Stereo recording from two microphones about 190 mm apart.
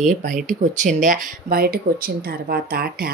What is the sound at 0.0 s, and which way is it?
A woman's voice, 45° right (ahead or behind).